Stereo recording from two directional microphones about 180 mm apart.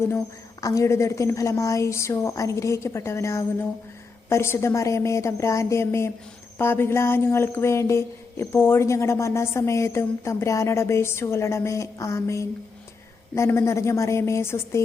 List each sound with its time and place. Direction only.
0.6 s speech: 15° left (ahead or behind)